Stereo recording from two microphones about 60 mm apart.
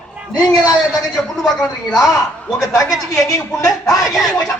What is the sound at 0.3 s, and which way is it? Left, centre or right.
Speech, left.